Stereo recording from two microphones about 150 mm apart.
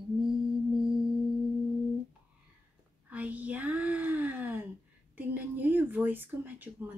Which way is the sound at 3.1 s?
10° right (ahead or behind).